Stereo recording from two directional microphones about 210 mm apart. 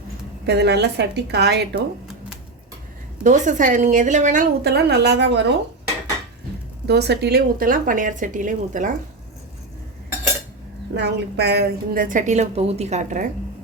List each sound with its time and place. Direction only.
0.4 s a woman's voice: 50° right (ahead or behind)
3.2 s a woman's voice: 35° right (ahead or behind)
4.6 s a woman's voice: 50° right (ahead or behind)
6.8 s a woman's voice: 50° right (ahead or behind)
10.9 s a woman's voice: 55° right (ahead or behind); by 13.2 s 35° right (ahead or behind)